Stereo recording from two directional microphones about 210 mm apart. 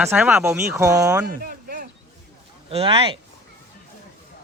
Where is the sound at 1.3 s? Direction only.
45° right (ahead or behind).